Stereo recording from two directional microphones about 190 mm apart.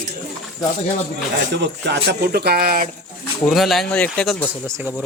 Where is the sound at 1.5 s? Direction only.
65° right (ahead or behind).